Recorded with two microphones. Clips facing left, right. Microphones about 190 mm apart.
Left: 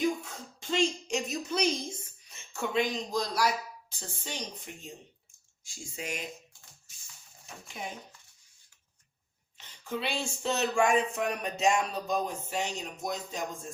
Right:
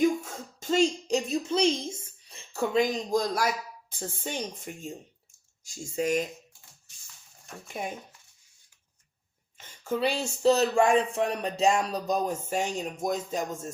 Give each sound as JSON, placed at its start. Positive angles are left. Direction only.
{"t": 0.0, "sound": "speech", "side_deg": -45}
{"t": 9.6, "sound": "speech", "side_deg": -45}